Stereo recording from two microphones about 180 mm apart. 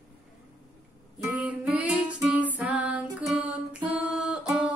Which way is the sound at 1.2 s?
5° right (ahead or behind).